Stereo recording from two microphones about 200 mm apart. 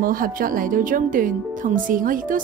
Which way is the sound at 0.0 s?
45° right (ahead or behind).